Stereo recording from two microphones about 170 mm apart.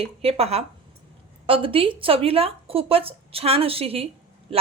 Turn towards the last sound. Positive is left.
turn(degrees=-35)  # may be behind; listen again after turning